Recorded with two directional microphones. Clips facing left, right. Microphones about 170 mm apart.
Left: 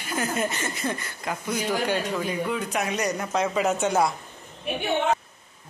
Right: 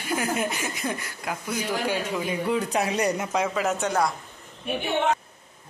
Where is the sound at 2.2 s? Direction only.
30° right (ahead or behind).